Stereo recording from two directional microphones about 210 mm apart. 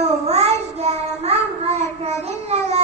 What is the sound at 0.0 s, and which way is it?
Child singing, 30° right (ahead or behind).